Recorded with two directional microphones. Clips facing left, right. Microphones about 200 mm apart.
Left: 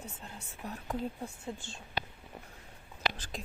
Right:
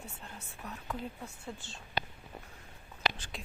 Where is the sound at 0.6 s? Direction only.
30° left (ahead or behind).